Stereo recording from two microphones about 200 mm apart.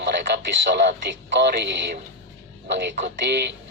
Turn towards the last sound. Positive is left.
turn(degrees=-60)  # may be behind; listen again after turning